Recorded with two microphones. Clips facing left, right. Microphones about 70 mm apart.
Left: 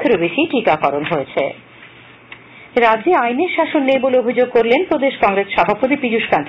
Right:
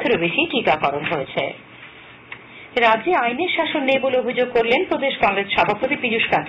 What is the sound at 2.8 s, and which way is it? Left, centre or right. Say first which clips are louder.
Speech: left 4 dB; centre.